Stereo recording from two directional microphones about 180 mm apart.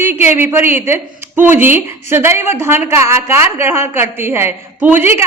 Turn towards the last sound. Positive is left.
turn(degrees=-10)  # may be behind; listen again after turning